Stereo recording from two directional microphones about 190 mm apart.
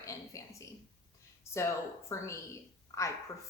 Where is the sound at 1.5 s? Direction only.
15° left (ahead or behind).